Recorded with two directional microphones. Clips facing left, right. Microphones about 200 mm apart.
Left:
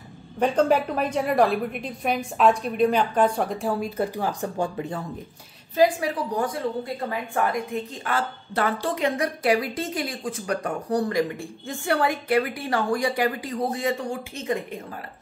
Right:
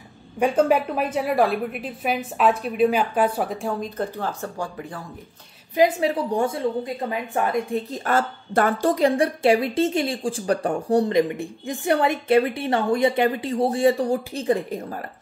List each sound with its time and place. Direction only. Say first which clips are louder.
0.4 s a woman's voice: right 1 dB; 5° right (ahead or behind); by 5.0 s 25° left (ahead or behind)
5.8 s a woman's voice: right 2 dB; 25° right (ahead or behind)
7.9 s a woman's voice: right 5 dB; 45° right (ahead or behind)